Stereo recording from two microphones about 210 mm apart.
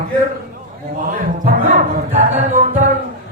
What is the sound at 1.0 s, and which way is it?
Speech, 40° right (ahead or behind).